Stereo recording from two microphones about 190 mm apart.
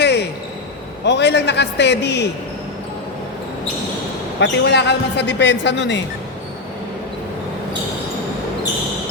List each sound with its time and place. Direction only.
0.0 s basketball bounce: 60° left (ahead or behind)
1.0 s a man's voice: 65° left (ahead or behind)
4.4 s a man's voice: 65° left (ahead or behind)